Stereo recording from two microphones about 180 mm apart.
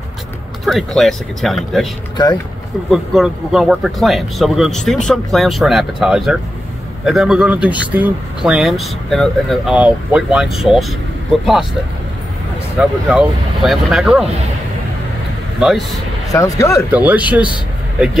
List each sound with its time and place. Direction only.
0.7 s speech: centre (ahead or behind)
2.9 s speech: centre (ahead or behind)
12.8 s speech: 5° right (ahead or behind)
15.6 s speech: centre (ahead or behind)
16.3 s speech: 20° left (ahead or behind)
16.9 s speech: 10° right (ahead or behind)